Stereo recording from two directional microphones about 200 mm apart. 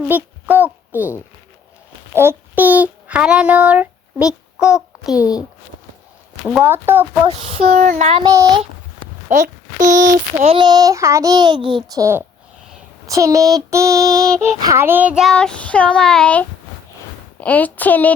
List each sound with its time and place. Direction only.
0.1 s a child's voice: 10° right (ahead or behind)
2.1 s a child's voice: 10° right (ahead or behind)
5.1 s speech: 20° left (ahead or behind)
6.4 s child singing: 5° right (ahead or behind)
7.3 s a sound: 30° right (ahead or behind)
8.3 s speech: 20° right (ahead or behind)
9.3 s speech: 40° right (ahead or behind); by 12.2 s 15° right (ahead or behind)
13.1 s child singing: 15° right (ahead or behind); by 16.5 s 5° left (ahead or behind)
17.4 s speech: 5° left (ahead or behind)